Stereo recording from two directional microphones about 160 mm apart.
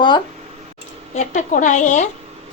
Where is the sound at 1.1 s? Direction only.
50° left (ahead or behind).